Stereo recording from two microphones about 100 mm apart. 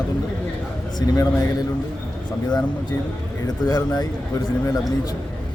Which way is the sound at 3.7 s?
40° left (ahead or behind).